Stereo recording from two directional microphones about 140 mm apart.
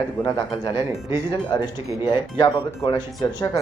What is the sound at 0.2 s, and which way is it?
A man's voice, 30° left (ahead or behind).